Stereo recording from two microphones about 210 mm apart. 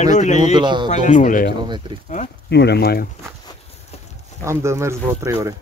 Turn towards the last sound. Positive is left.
turn(degrees=-15)  # may be behind; listen again after turning